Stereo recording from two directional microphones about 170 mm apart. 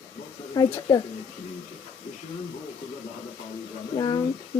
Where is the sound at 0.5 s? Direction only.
20° left (ahead or behind).